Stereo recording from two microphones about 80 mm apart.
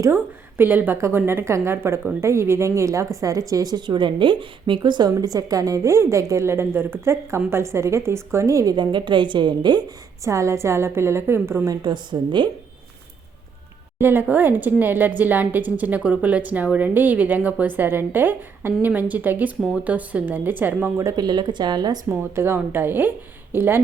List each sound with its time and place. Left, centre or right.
0.1 s a woman's voice: right
8.7 s a woman's voice: right
10.2 s a woman's voice: right
11.8 s a woman's voice: right
14.0 s speech: right
21.2 s speech: right
22.1 s speech: right